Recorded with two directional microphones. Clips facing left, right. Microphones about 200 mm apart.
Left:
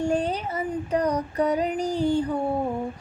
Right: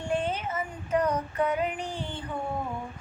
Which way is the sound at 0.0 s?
40° left (ahead or behind).